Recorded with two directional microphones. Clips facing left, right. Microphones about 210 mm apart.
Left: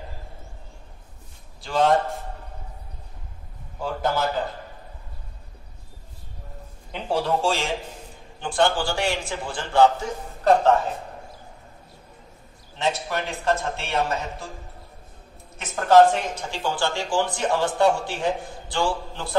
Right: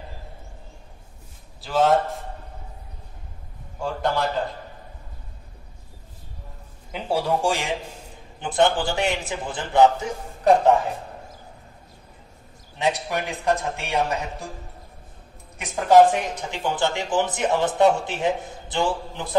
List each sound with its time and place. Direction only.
1.6 s a man's voice: centre (ahead or behind)
3.8 s a man's voice: centre (ahead or behind)
6.9 s a man's voice: 10° right (ahead or behind)
12.7 s a man's voice: 15° right (ahead or behind)
15.5 s speech: 15° right (ahead or behind)